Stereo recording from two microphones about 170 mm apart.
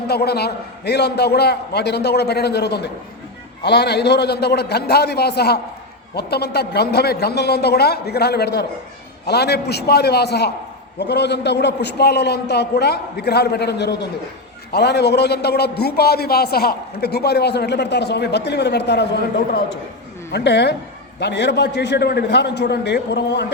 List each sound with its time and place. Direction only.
0.1 s a man's voice: 70° left (ahead or behind)
20.3 s a woman's voice: 90° left